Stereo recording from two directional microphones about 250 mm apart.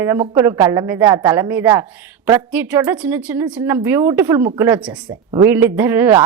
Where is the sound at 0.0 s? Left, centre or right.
Centre.